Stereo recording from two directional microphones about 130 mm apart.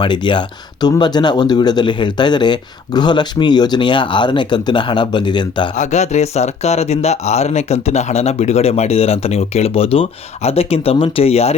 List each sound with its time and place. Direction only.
0.0 s speech: 35° left (ahead or behind)
5.7 s speech: 65° left (ahead or behind)